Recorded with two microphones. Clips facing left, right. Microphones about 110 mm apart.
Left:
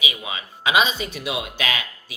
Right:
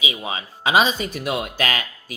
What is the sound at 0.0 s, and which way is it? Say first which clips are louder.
Speech: right 2 dB; 30° right (ahead or behind).